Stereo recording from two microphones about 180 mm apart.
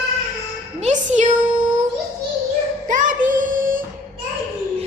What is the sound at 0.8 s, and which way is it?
Music, 40° right (ahead or behind).